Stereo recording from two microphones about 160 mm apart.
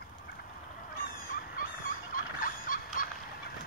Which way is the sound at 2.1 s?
60° left (ahead or behind).